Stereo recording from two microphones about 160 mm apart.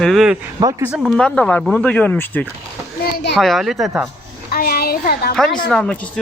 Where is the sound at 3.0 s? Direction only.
90° left.